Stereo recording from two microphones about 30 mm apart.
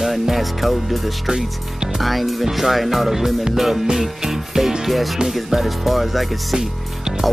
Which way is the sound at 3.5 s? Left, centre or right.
Centre.